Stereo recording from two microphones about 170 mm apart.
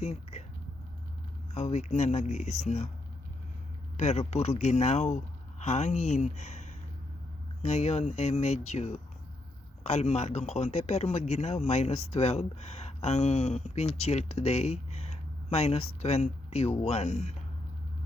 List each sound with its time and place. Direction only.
0.0 s a sound: 40° left (ahead or behind)
1.5 s a man's voice: 40° left (ahead or behind)
3.9 s a man's voice: 40° left (ahead or behind)